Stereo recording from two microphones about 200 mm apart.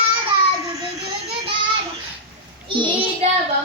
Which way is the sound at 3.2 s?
30° right (ahead or behind).